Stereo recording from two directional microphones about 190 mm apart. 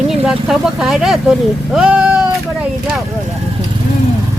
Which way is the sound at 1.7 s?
5° right (ahead or behind).